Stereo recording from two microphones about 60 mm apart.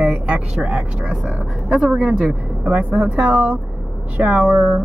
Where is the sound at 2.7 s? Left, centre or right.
Right.